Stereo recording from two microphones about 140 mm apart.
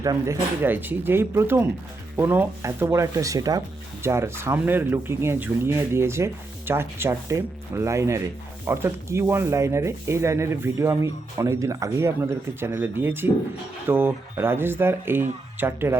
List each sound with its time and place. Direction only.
0.0 s speech: 25° right (ahead or behind)